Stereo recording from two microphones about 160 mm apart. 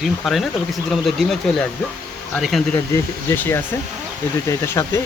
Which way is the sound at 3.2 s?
15° left (ahead or behind).